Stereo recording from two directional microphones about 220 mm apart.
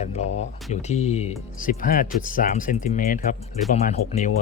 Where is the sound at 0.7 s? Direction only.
30° left (ahead or behind).